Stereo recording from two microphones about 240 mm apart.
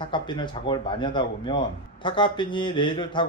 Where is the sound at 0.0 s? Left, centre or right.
Centre.